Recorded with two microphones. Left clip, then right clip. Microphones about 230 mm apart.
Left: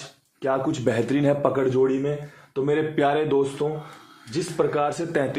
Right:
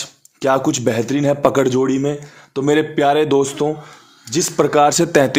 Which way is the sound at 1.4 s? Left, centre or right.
Right.